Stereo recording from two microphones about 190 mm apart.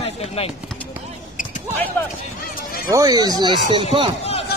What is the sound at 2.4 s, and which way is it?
Run, 50° left (ahead or behind).